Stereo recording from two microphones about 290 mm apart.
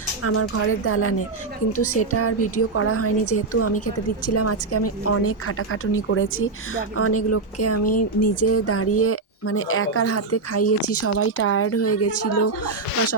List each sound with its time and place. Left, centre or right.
0.3 s a woman's voice: left